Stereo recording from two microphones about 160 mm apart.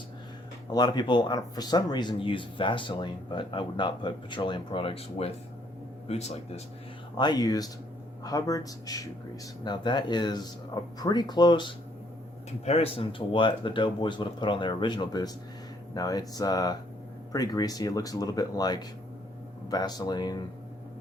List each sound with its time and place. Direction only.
0.7 s speech: 25° left (ahead or behind)
7.2 s speech: 25° left (ahead or behind)
12.6 s speech: 40° left (ahead or behind)